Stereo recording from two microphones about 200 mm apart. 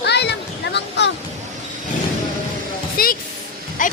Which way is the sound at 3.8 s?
40° left (ahead or behind).